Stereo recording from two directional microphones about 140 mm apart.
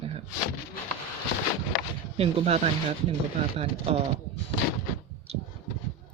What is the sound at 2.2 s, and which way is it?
Speech, 45° right (ahead or behind).